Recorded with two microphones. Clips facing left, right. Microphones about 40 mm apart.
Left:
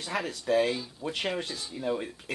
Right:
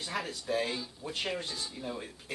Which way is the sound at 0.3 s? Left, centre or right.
Left.